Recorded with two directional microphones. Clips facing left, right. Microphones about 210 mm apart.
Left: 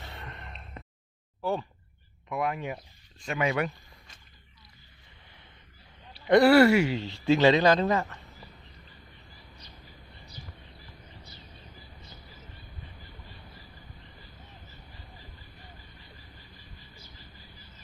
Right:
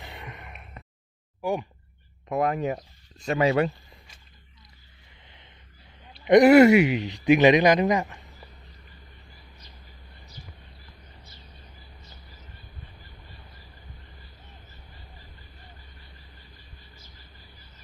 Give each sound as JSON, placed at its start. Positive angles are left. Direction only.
{"t": 0.0, "sound": "gasp", "side_deg": -15}
{"t": 1.4, "sound": "a sound", "side_deg": -15}
{"t": 2.3, "sound": "speech", "side_deg": -40}
{"t": 6.2, "sound": "speech", "side_deg": -20}